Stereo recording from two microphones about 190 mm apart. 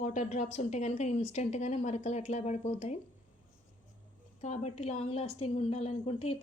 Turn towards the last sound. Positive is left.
turn(degrees=30)  # may be behind; listen again after turning